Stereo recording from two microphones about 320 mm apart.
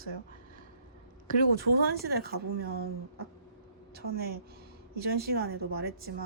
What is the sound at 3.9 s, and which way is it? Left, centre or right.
A woman's voice, right.